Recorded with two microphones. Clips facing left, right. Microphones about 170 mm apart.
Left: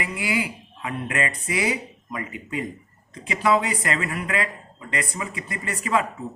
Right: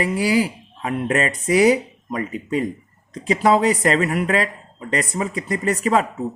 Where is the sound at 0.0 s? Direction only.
35° right (ahead or behind).